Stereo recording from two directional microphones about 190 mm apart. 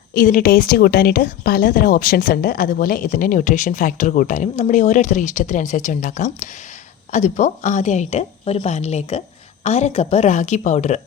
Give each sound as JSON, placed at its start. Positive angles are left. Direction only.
{"t": 0.1, "sound": "a woman's voice", "side_deg": 50}